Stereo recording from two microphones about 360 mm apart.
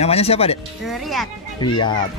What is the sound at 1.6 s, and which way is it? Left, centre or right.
Speech, centre.